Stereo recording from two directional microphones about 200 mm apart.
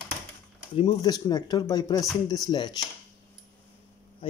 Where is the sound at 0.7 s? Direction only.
20° left (ahead or behind).